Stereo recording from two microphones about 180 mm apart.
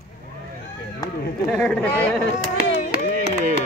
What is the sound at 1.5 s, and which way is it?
Speech, 5° left (ahead or behind).